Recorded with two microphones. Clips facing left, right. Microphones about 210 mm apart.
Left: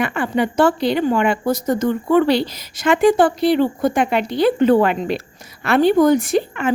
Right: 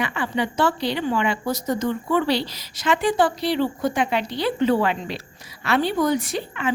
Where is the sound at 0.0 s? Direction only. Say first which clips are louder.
Left 5 dB; 50° left (ahead or behind).